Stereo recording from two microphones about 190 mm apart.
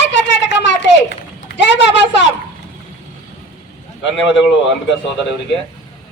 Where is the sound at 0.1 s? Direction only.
70° left (ahead or behind).